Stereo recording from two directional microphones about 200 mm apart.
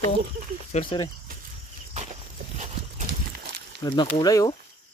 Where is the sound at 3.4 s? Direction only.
55° right (ahead or behind).